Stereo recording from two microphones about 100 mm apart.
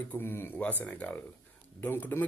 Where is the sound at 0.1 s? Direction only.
20° left (ahead or behind).